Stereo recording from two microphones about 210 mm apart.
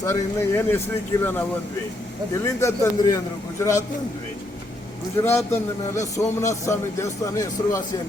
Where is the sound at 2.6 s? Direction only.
15° left (ahead or behind).